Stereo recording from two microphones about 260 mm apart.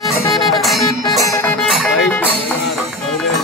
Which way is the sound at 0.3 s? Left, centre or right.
Centre.